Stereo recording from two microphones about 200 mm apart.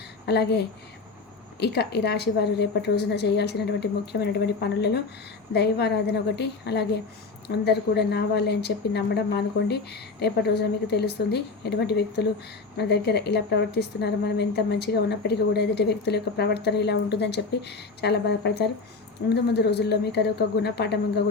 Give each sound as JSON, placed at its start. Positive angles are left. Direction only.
{"t": 0.3, "sound": "a woman's voice", "side_deg": 55}